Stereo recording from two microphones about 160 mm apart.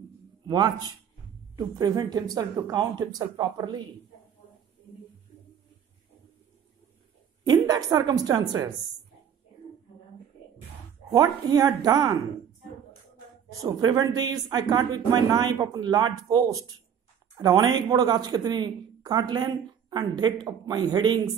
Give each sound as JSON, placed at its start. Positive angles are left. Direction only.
{"t": 0.5, "sound": "speech", "side_deg": -25}
{"t": 7.4, "sound": "speech", "side_deg": -25}
{"t": 11.1, "sound": "speech", "side_deg": -25}
{"t": 13.5, "sound": "speech", "side_deg": -20}